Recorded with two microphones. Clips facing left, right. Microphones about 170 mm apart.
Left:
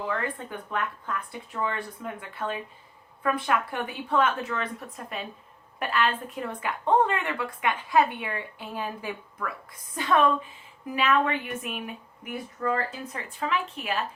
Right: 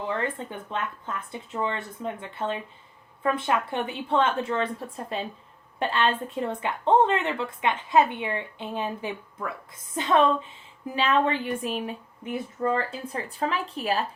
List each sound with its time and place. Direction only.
0.1 s a woman's voice: 25° right (ahead or behind)